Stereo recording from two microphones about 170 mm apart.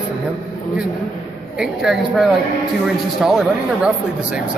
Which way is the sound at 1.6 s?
Centre (ahead or behind).